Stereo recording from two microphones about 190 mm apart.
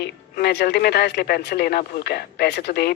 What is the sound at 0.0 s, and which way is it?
Speech, 60° left (ahead or behind).